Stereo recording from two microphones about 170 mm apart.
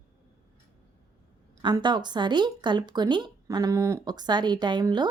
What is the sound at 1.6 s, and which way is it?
Speech, 25° right (ahead or behind).